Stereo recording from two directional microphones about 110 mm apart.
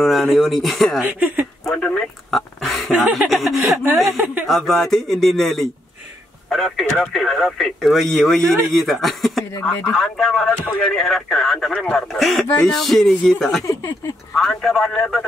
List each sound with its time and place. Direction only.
0.0 s speech: centre (ahead or behind)
1.0 s speech: 15° right (ahead or behind)
1.6 s a sound: 10° left (ahead or behind)
4.5 s speech: centre (ahead or behind)
9.7 s speech: 20° left (ahead or behind)
9.9 s speech: 5° left (ahead or behind)
13.7 s speech: 25° left (ahead or behind)
14.3 s speech: 5° left (ahead or behind)